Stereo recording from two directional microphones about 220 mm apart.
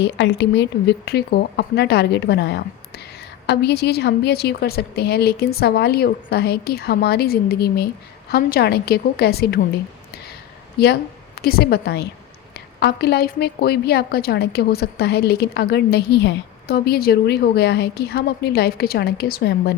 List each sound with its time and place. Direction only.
0.0 s a woman's voice: 55° left (ahead or behind)
11.3 s a woman's voice: 45° left (ahead or behind)